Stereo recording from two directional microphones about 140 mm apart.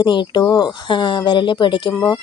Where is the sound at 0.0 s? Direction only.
35° left (ahead or behind).